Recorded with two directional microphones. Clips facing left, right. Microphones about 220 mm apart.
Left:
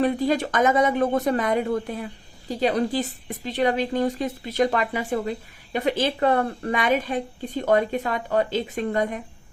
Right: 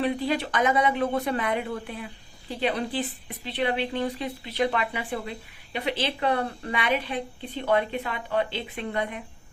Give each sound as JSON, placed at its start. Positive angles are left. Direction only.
{"t": 0.0, "sound": "a woman's voice", "side_deg": 45}